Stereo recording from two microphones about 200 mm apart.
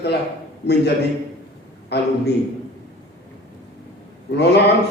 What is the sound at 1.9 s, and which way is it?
Speech, 60° left (ahead or behind).